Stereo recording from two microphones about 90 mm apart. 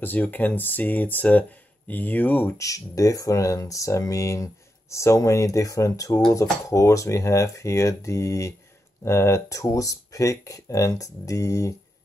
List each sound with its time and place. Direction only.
0.0 s speech: 20° left (ahead or behind)
2.5 s speech: 40° left (ahead or behind)